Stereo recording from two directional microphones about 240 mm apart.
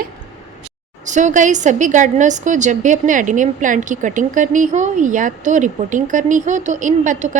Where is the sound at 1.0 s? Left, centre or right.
Right.